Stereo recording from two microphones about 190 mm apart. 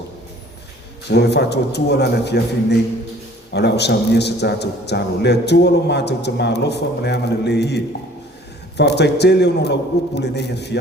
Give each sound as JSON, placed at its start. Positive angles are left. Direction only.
{"t": 1.0, "sound": "a man's voice", "side_deg": 60}
{"t": 8.8, "sound": "a man's voice", "side_deg": 60}